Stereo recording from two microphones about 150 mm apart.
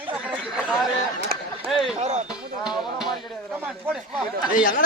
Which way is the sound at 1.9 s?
50° right (ahead or behind).